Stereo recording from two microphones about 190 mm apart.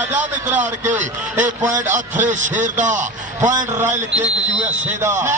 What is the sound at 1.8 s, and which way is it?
Speech, 10° right (ahead or behind).